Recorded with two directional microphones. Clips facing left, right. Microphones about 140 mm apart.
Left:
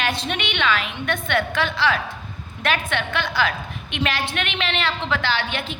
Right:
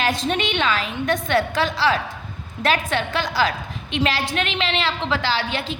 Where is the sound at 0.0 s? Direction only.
40° right (ahead or behind).